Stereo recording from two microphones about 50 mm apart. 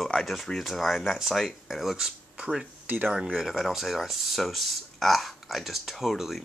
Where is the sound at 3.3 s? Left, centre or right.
Centre.